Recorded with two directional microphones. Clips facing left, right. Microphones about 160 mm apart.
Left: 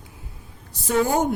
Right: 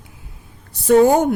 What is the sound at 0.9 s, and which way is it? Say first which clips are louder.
Speech: right 9 dB; 60° right (ahead or behind).